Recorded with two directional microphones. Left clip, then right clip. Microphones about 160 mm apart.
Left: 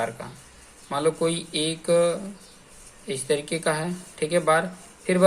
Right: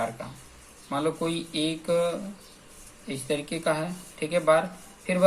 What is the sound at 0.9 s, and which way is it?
Speech, 50° left (ahead or behind).